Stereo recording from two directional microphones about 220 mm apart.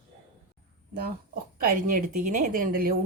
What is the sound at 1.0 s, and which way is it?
Speech, 45° right (ahead or behind).